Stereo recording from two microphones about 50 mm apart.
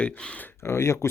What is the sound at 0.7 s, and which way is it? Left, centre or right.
Speech, left.